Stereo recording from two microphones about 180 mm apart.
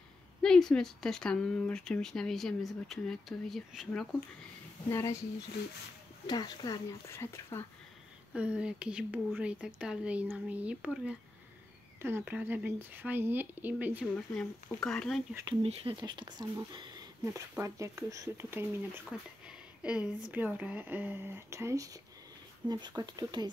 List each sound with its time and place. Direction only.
0.4 s speech: 5° left (ahead or behind)
4.8 s speech: 15° left (ahead or behind)
6.2 s speech: 20° left (ahead or behind)
8.3 s speech: 5° right (ahead or behind)
14.3 s speech: 5° left (ahead or behind)
15.6 s speech: 30° right (ahead or behind)